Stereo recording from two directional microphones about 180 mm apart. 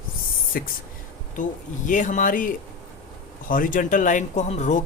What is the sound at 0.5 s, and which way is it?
Speech, 55° left (ahead or behind).